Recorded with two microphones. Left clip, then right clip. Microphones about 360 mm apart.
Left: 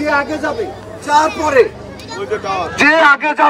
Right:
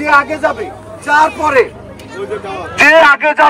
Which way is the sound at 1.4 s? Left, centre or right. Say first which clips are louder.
Right 1 dB; centre.